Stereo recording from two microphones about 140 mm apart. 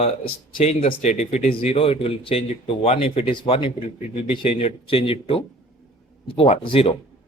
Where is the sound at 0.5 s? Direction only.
45° left (ahead or behind).